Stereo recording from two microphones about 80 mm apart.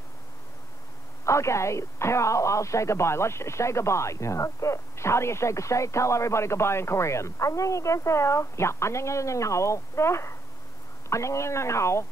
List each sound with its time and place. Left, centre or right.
1.2 s speech: left